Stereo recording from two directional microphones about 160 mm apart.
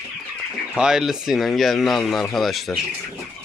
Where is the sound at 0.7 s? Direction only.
5° right (ahead or behind).